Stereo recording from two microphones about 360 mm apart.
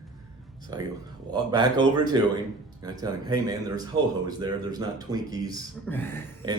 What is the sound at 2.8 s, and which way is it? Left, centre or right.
Speech, centre.